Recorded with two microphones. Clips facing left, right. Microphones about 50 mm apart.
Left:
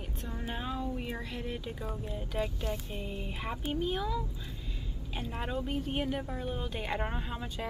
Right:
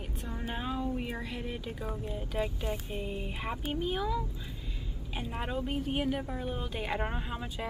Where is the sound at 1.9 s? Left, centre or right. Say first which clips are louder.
Right 1 dB; centre.